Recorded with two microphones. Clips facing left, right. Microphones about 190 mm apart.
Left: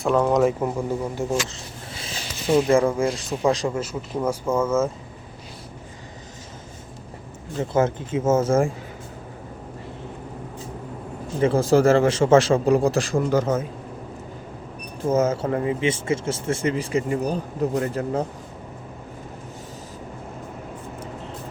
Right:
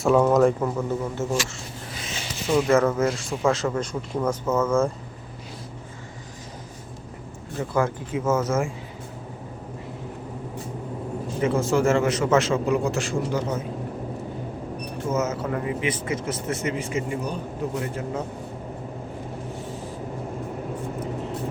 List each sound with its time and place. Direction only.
0.0 s speech: 5° right (ahead or behind)
0.6 s a man's voice: 15° left (ahead or behind)
2.0 s a sound: 30° left (ahead or behind)
2.6 s a man's voice: 10° left (ahead or behind)
7.6 s speech: 25° left (ahead or behind)
11.3 s speech: 35° left (ahead or behind)
15.1 s speech: 30° left (ahead or behind)